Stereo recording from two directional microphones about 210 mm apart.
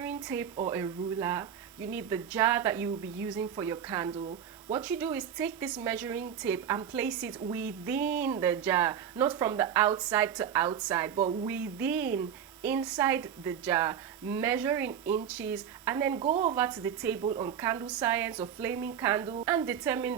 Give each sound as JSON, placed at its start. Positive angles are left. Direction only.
{"t": 0.0, "sound": "a sound", "side_deg": -10}
{"t": 0.7, "sound": "speech", "side_deg": -10}
{"t": 16.2, "sound": "speech", "side_deg": -35}
{"t": 16.6, "sound": "speech", "side_deg": -5}